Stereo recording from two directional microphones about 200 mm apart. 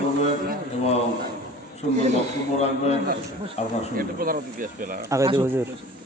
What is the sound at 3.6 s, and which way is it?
Speech, 30° left (ahead or behind).